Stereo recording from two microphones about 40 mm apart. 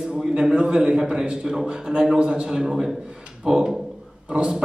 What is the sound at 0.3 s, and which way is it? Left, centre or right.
A man's voice, right.